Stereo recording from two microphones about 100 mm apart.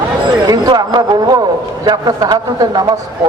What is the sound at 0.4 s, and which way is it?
A woman's voice, 40° right (ahead or behind).